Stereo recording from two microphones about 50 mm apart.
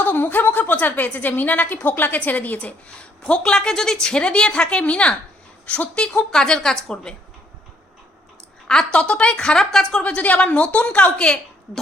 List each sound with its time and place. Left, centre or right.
0.0 s a woman's voice: left; by 7.2 s centre
8.6 s speech: centre
10.0 s a woman's voice: left